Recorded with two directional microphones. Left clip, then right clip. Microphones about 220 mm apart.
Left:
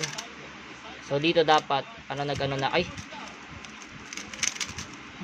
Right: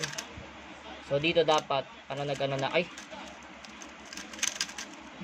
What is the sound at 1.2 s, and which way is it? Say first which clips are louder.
Speech: left 4 dB; 15° left (ahead or behind).